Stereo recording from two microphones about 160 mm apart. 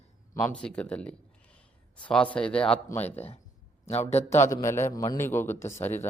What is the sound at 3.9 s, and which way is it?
Speech, 40° left (ahead or behind).